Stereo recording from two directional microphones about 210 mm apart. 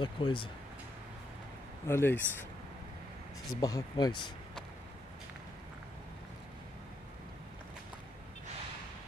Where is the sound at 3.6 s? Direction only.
15° left (ahead or behind).